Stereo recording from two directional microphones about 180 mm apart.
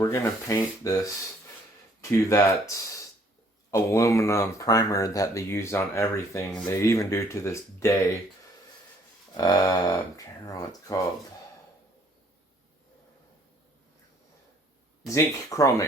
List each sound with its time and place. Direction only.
0.0 s speech: 15° left (ahead or behind)
2.0 s speech: 15° left (ahead or behind)
9.3 s speech: 20° left (ahead or behind)
15.1 s speech: 15° left (ahead or behind)